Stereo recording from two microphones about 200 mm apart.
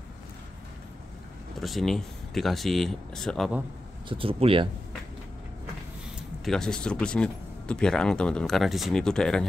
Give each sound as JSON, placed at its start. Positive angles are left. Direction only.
{"t": 1.6, "sound": "speech", "side_deg": 0}
{"t": 4.1, "sound": "speech", "side_deg": -25}
{"t": 6.4, "sound": "speech", "side_deg": 5}